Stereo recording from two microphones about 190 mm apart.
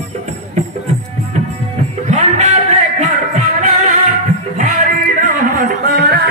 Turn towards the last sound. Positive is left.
turn(degrees=-55)  # may be behind; listen again after turning